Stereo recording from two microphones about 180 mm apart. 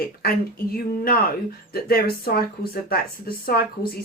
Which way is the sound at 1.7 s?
60° left (ahead or behind).